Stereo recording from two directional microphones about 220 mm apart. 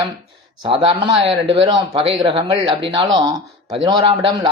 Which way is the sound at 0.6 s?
25° right (ahead or behind).